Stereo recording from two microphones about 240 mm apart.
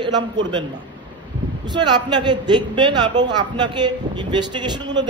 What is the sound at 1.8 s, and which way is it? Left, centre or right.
A man's voice, centre.